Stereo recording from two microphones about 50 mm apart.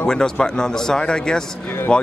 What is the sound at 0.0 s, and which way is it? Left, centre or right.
Speech, centre.